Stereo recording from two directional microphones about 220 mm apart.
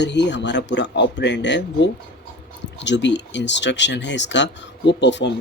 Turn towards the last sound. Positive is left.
turn(degrees=55)  # may be behind; listen again after turning